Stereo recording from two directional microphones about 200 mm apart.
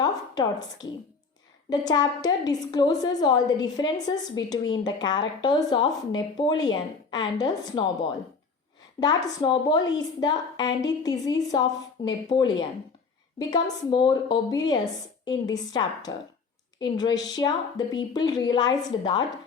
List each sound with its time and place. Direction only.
0.0 s a woman's voice: 20° left (ahead or behind)